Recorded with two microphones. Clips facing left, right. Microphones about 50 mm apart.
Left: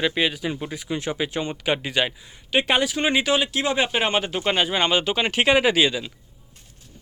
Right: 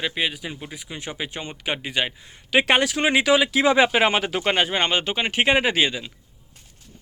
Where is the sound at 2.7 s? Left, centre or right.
Right.